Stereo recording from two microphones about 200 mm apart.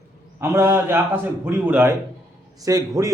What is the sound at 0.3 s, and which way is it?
A man's voice, 15° right (ahead or behind).